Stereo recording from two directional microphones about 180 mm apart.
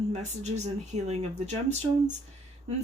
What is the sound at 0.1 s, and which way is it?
Speech, 40° right (ahead or behind).